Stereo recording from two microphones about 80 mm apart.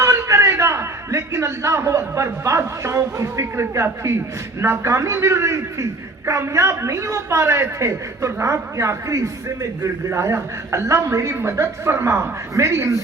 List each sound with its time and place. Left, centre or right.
0.0 s a man's voice: right